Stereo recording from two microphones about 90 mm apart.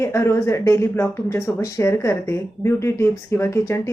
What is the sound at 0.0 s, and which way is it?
Speech, 30° left (ahead or behind).